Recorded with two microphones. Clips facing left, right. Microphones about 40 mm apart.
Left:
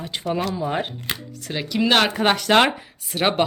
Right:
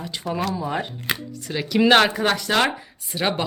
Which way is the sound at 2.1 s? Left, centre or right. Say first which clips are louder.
Left 2 dB; left.